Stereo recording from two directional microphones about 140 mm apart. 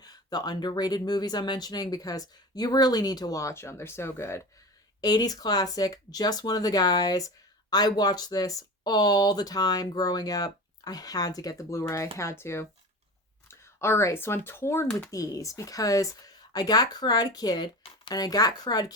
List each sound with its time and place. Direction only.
0.0 s speech: 30° left (ahead or behind)